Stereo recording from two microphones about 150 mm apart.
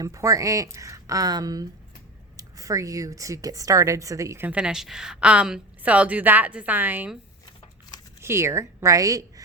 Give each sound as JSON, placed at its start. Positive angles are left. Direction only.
{"t": 0.0, "sound": "a woman's voice", "side_deg": -20}
{"t": 8.2, "sound": "speech", "side_deg": -15}